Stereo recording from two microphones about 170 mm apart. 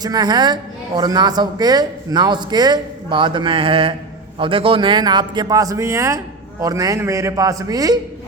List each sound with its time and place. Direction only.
0.0 s speech: 25° right (ahead or behind)